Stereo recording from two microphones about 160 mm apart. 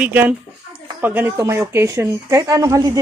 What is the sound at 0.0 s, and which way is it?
Speech, 10° right (ahead or behind).